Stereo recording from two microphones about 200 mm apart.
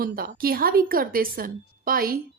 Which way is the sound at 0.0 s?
45° right (ahead or behind).